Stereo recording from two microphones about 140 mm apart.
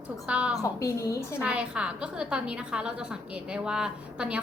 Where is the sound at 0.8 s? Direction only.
20° left (ahead or behind).